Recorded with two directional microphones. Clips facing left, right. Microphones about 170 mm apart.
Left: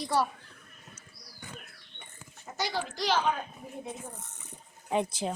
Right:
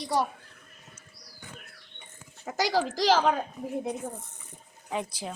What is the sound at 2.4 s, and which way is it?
Speech, 90° right.